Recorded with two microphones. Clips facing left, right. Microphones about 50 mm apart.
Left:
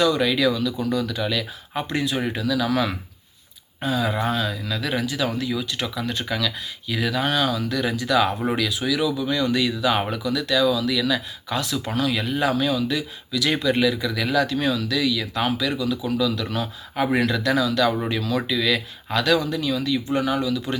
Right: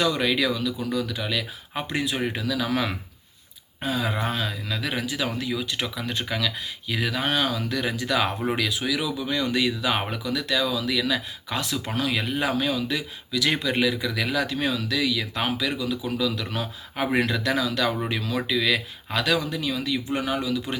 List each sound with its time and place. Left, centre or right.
0.0 s speech: right